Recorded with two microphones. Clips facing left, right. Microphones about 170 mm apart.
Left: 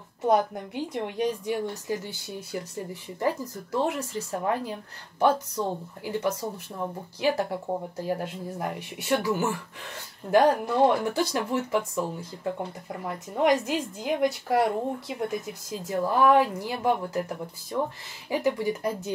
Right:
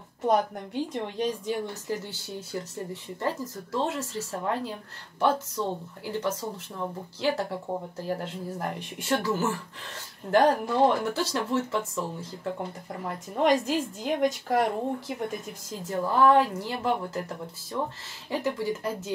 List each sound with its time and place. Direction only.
0.2 s a woman's voice: 10° left (ahead or behind)
6.0 s a woman's voice: 15° left (ahead or behind)
13.4 s a woman's voice: 10° left (ahead or behind)